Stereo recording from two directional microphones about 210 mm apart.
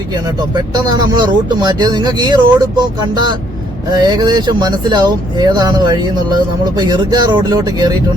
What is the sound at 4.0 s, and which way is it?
Speech, 20° right (ahead or behind).